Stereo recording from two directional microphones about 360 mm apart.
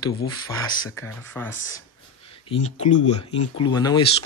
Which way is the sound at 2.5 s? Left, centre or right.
Centre.